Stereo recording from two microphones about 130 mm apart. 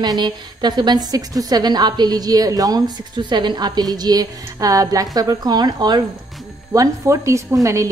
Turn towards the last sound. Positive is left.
turn(degrees=-25)  # may be behind; listen again after turning